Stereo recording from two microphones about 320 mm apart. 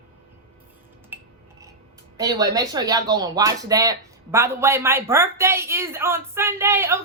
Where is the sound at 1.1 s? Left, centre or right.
Centre.